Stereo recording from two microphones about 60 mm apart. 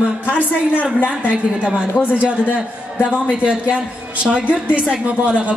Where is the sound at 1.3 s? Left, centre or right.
Centre.